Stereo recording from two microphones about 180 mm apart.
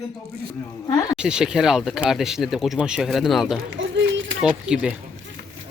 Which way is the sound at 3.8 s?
90° right.